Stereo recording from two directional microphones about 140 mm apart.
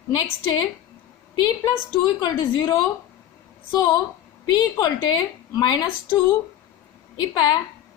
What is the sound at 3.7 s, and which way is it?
A woman's voice, 30° left (ahead or behind).